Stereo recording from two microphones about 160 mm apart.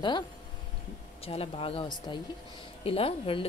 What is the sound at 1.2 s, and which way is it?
A woman's voice, 35° left (ahead or behind).